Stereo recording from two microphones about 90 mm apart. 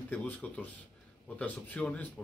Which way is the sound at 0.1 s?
20° left (ahead or behind).